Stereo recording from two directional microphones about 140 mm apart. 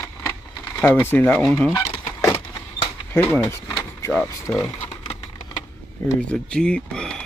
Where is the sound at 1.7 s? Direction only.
20° left (ahead or behind).